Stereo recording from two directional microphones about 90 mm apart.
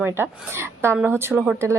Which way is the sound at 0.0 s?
25° right (ahead or behind).